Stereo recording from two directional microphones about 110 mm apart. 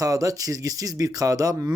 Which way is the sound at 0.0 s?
30° right (ahead or behind).